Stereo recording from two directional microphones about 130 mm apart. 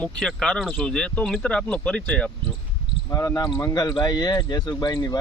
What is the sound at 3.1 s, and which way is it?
Speech, 20° left (ahead or behind).